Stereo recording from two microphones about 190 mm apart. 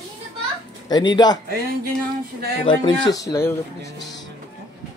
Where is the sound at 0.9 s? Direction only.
20° left (ahead or behind).